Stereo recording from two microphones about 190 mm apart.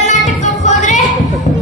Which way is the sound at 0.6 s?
40° left (ahead or behind).